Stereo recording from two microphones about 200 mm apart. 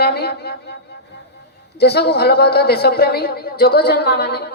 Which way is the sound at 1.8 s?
55° left (ahead or behind).